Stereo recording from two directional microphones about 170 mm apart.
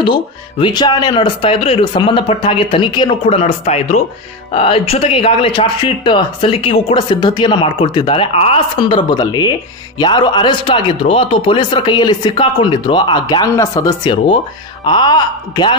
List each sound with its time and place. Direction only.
0.0 s speech: 30° left (ahead or behind)